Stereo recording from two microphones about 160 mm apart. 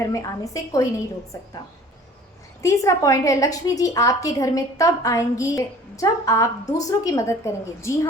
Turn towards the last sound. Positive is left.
turn(degrees=15)  # may be behind; listen again after turning